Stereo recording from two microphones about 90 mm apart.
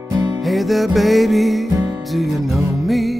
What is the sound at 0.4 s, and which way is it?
Music, centre (ahead or behind).